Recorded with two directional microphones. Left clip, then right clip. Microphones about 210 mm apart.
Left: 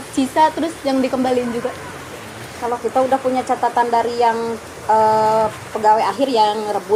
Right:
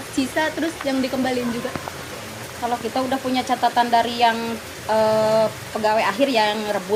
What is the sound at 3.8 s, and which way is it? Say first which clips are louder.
Speech: left 1 dB; 40° right (ahead or behind).